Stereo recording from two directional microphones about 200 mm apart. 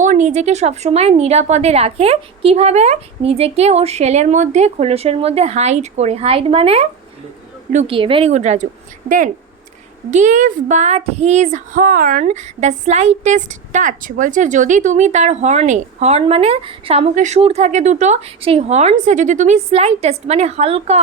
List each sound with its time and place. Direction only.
0.0 s speech: 40° right (ahead or behind)